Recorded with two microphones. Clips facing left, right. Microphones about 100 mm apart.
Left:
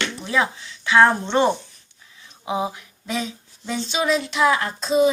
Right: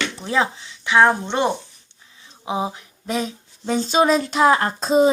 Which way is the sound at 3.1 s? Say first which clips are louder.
Right 3 dB; 40° right (ahead or behind).